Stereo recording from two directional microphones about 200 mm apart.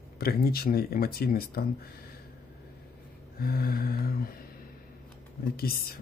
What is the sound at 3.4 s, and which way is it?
Speech, 50° left (ahead or behind).